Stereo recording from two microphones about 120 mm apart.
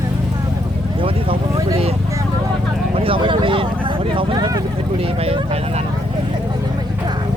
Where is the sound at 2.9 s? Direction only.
50° right (ahead or behind).